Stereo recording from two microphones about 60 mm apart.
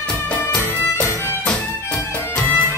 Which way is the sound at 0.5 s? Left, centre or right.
Left.